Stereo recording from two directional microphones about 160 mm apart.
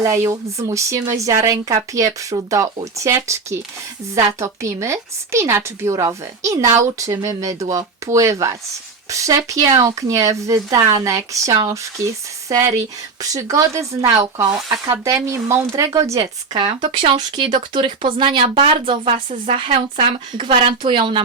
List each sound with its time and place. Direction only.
0.0 s a woman's voice: 20° right (ahead or behind)
13.3 s a woman's voice: 20° right (ahead or behind)
16.2 s speech: 30° right (ahead or behind)
19.1 s speech: 45° right (ahead or behind)
19.5 s speech: 35° right (ahead or behind)